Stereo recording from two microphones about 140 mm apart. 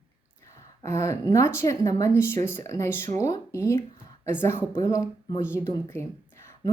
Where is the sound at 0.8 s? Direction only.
20° left (ahead or behind).